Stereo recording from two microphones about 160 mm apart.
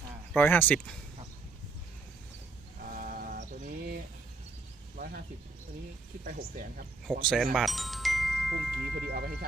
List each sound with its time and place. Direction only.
0.3 s speech: 10° left (ahead or behind)
2.9 s a sound: 60° right (ahead or behind)
6.2 s speech: 55° right (ahead or behind)
7.1 s speech: 10° right (ahead or behind)
7.5 s chime: centre (ahead or behind)
9.1 s speech: 80° right